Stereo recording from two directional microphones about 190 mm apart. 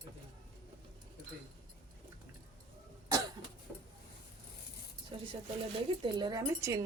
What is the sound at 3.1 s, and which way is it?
Cough, 20° right (ahead or behind).